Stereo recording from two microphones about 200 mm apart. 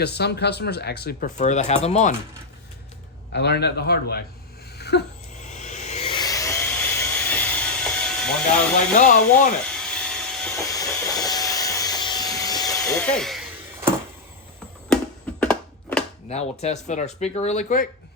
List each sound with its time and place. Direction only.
0.0 s speech: 55° left (ahead or behind)
1.4 s speech: 35° left (ahead or behind)
3.3 s speech: 55° left (ahead or behind)
4.8 s a sound: 55° left (ahead or behind)
5.4 s a sound: 35° left (ahead or behind); by 8.6 s 5° left (ahead or behind)
9.0 s speech: 40° left (ahead or behind)
9.7 s vacuum cleaner: 5° left (ahead or behind)
10.7 s vacuum cleaner: 15° left (ahead or behind)
12.9 s speech: 5° left (ahead or behind)
14.9 s a sound: 5° left (ahead or behind)
16.3 s speech: 35° left (ahead or behind)